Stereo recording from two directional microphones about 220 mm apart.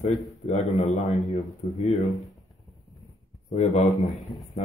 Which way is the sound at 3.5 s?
30° left (ahead or behind).